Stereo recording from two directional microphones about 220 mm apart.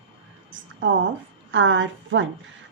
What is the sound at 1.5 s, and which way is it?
Speech, 60° right (ahead or behind).